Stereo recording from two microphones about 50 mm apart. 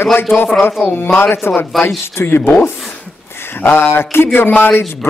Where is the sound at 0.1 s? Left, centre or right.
Left.